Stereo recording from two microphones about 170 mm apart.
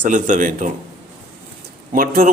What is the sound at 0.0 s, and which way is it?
Speech, 50° right (ahead or behind).